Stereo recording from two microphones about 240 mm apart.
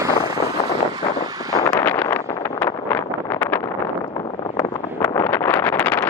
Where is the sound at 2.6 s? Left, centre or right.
Centre.